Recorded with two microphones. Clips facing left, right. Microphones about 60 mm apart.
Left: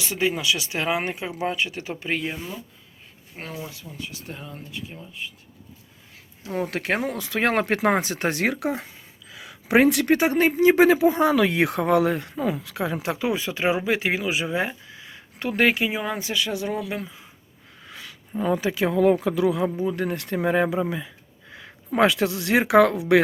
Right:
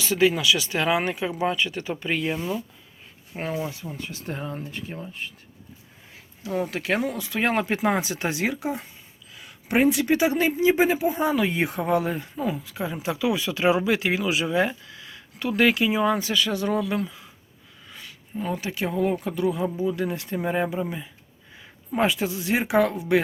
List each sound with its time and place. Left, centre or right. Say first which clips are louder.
0.3 s speech: right 2 dB; centre
1.9 s speech: right 1 dB; centre
3.3 s speech: right 7 dB; centre
3.9 s speech: right 3 dB; right
6.7 s speech: even; left
7.2 s speech: left 2 dB; left
7.9 s speech: left 2 dB; left
10.2 s speech: left 2 dB; left
13.1 s speech: even; left; by 15.2 s centre
15.4 s speech: right 1 dB; left
15.6 s speech: right 1 dB; left
16.0 s speech: right 4 dB; centre
18.9 s speech: left 5 dB; left
19.6 s speech: left 1 dB; left